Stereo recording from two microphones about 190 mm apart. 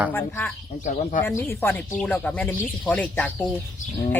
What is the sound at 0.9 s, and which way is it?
Speech, 40° left (ahead or behind).